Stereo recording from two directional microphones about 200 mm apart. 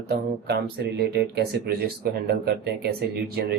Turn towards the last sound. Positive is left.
turn(degrees=-50)  # may be behind; listen again after turning